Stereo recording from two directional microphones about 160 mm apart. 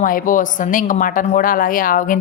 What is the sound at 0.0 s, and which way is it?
A woman's voice, 55° left (ahead or behind).